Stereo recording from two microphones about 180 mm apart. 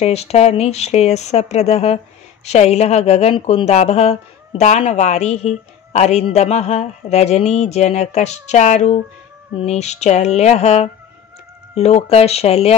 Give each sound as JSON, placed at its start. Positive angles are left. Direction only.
{"t": 0.0, "sound": "speech", "side_deg": 35}